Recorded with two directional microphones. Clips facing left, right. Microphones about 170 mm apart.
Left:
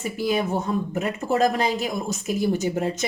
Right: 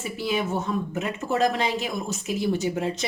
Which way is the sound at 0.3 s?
40° left (ahead or behind).